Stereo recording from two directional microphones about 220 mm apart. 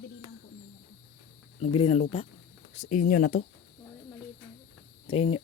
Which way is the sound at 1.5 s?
30° left (ahead or behind).